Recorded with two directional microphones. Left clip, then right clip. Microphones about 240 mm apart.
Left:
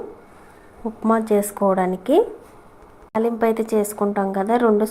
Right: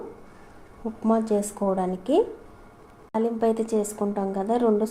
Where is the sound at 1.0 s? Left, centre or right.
Centre.